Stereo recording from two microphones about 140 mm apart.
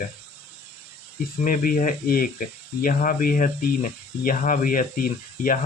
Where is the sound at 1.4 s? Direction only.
75° left (ahead or behind).